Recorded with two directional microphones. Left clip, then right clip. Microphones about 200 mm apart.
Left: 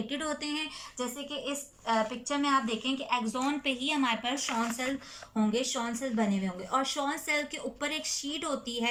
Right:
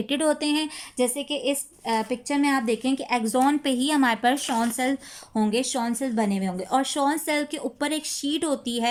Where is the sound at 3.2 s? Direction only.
75° right (ahead or behind).